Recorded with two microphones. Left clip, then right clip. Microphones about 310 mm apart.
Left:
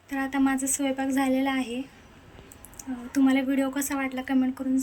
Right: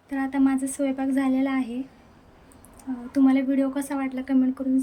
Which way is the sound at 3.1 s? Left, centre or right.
Centre.